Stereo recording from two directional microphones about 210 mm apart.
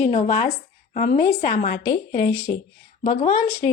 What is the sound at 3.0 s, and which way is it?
Speech, 35° left (ahead or behind).